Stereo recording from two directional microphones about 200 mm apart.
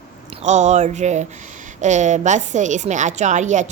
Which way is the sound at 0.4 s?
35° right (ahead or behind).